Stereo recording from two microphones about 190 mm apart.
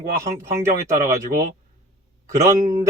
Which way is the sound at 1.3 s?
45° right (ahead or behind).